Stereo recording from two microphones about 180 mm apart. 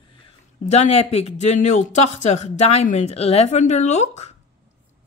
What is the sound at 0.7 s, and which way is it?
Speech, 35° left (ahead or behind).